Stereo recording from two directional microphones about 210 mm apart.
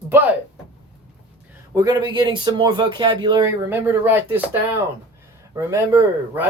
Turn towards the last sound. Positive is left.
turn(degrees=-10)  # may be behind; listen again after turning